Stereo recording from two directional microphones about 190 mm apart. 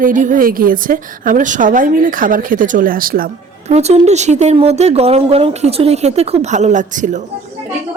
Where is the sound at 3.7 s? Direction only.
35° right (ahead or behind).